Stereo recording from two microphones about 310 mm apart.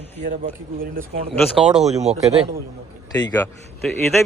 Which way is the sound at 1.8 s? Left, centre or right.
Right.